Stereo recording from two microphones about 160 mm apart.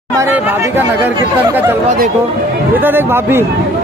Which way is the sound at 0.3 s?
15° right (ahead or behind).